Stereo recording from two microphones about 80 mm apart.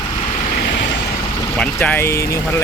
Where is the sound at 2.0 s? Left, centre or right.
Left.